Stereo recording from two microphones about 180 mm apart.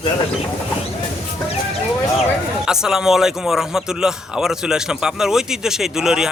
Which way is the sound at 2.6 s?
5° right (ahead or behind).